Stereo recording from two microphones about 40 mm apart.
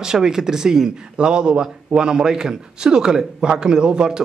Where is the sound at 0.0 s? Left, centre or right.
Centre.